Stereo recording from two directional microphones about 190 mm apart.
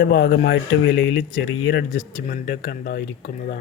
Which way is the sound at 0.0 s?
60° left (ahead or behind).